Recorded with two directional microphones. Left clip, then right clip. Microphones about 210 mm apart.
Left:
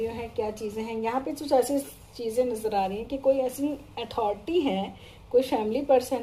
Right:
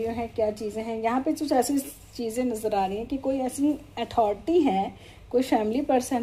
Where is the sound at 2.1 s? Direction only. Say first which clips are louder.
Left 2 dB; 50° right (ahead or behind).